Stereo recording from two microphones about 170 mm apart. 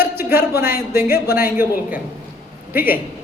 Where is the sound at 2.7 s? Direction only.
10° right (ahead or behind).